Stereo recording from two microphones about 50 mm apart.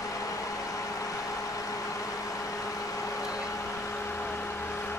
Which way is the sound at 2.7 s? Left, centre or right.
Left.